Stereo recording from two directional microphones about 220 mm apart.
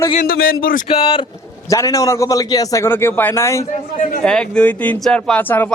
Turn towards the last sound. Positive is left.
turn(degrees=10)  # may be behind; listen again after turning